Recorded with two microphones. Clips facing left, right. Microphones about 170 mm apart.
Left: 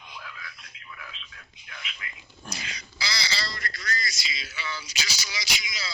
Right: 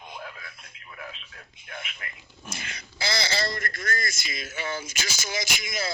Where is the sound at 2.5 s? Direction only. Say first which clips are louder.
Right 3 dB; 50° right (ahead or behind).